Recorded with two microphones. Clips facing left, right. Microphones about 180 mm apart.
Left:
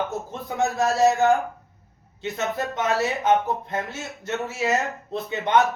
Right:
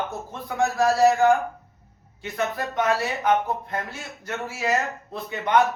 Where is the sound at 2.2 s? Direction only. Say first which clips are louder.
Left 1 dB; 25° left (ahead or behind).